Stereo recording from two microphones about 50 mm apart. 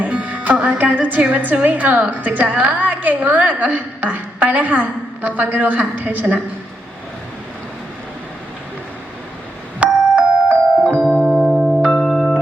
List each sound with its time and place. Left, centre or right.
0.0 s a woman's voice: right
9.8 s music: right
11.1 s piano: centre
11.6 s music: centre